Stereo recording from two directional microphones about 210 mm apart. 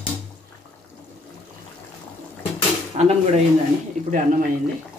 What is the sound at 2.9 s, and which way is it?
Speech, 30° right (ahead or behind).